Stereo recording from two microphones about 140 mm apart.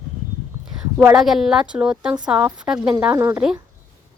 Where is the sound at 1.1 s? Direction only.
Centre (ahead or behind).